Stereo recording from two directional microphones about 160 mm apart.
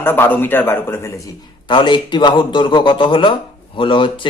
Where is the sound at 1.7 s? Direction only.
30° left (ahead or behind).